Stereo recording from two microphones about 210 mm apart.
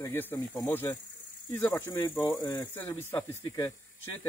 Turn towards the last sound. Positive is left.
turn(degrees=15)  # may be behind; listen again after turning